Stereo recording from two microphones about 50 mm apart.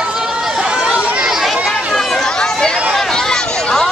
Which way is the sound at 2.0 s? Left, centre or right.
Centre.